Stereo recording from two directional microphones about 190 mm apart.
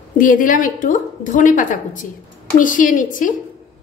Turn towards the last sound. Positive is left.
turn(degrees=45)  # may be behind; listen again after turning